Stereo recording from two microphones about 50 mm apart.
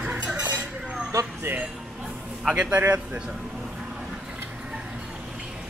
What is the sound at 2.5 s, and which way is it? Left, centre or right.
Speech, right.